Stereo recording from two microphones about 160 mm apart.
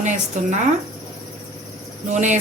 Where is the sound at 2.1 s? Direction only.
50° right (ahead or behind).